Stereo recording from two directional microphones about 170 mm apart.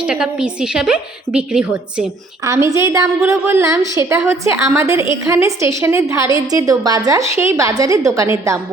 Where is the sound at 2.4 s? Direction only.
20° right (ahead or behind).